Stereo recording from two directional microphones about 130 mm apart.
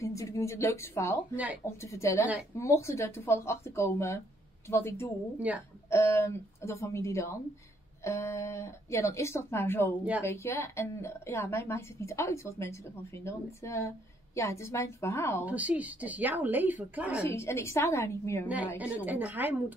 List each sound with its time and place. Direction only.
0.0 s a woman's voice: 25° left (ahead or behind)
1.3 s a woman's voice: 10° right (ahead or behind)
1.8 s a woman's voice: 20° left (ahead or behind)
5.5 s a woman's voice: 10° right (ahead or behind)
5.9 s a woman's voice: 20° left (ahead or behind)
15.4 s a woman's voice: 10° right (ahead or behind)
17.2 s a woman's voice: 20° left (ahead or behind)
18.8 s a woman's voice: 10° right (ahead or behind)